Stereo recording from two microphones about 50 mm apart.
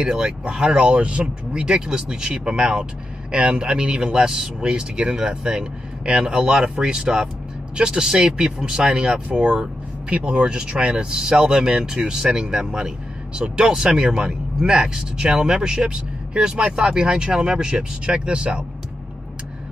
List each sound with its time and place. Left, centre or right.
0.0 s speech: centre